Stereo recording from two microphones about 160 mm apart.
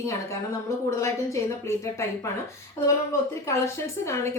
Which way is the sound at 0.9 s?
20° left (ahead or behind).